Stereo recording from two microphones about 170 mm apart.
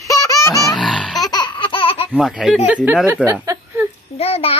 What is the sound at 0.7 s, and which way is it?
Grunt, centre (ahead or behind).